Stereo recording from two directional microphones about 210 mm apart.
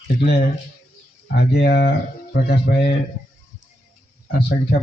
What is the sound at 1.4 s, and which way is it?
A man's voice, 50° left (ahead or behind).